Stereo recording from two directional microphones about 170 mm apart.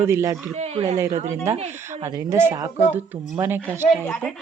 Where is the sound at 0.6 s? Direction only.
40° right (ahead or behind).